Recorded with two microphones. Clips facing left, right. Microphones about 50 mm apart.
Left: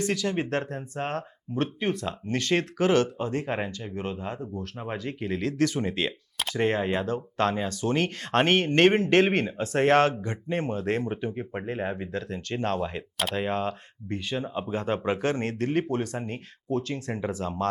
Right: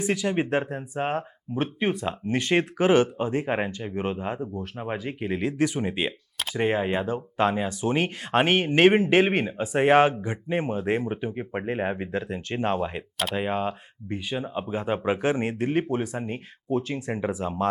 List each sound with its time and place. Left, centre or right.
0.0 s speech: centre